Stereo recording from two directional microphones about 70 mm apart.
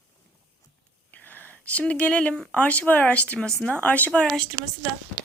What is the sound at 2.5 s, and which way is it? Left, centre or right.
Speech, left.